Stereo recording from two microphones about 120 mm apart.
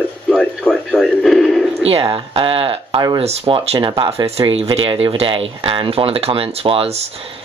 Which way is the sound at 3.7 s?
45° right (ahead or behind).